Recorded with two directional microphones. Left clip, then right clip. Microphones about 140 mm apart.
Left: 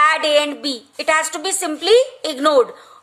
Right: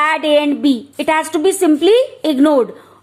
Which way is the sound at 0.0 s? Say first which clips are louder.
Right 1 dB; 30° right (ahead or behind).